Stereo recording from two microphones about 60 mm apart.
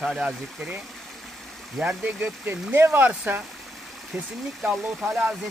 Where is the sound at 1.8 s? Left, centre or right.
Right.